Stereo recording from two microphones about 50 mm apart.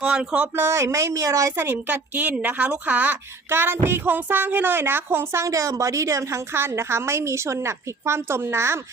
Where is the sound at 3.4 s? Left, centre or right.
Right.